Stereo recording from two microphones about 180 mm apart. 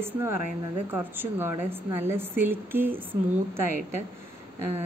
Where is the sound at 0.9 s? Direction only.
10° right (ahead or behind).